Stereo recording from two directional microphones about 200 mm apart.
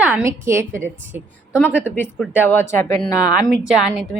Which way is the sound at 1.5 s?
5° left (ahead or behind).